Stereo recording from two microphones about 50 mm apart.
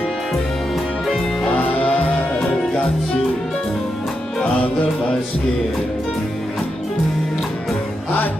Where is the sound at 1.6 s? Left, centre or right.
Left.